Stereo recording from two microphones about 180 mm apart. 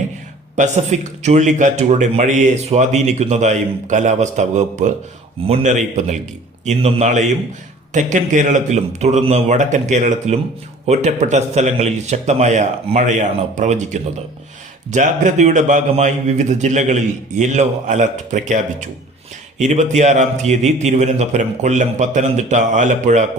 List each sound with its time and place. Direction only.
0.5 s a man's voice: 40° right (ahead or behind)